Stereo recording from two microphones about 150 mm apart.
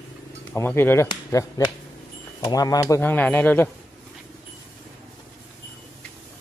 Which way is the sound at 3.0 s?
10° left (ahead or behind).